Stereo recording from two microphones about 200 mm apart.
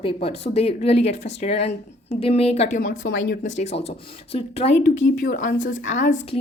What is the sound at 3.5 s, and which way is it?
A woman's voice, 30° left (ahead or behind).